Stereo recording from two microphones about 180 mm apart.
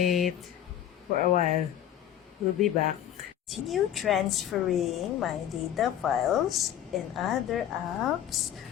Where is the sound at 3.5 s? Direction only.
Centre (ahead or behind).